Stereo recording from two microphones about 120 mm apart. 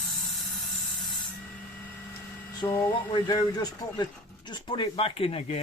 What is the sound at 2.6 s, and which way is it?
Speech, 30° left (ahead or behind).